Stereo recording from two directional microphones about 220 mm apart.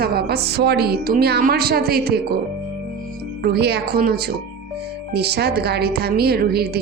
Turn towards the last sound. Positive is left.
turn(degrees=-45)  # may be behind; listen again after turning